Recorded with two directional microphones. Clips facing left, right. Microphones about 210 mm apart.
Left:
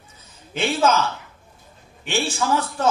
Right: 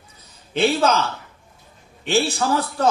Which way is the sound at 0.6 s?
35° right (ahead or behind).